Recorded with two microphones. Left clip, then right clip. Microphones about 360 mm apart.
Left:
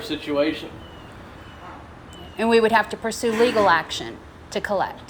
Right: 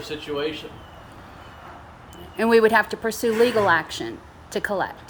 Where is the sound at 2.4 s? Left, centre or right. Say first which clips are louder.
Right 1 dB; centre.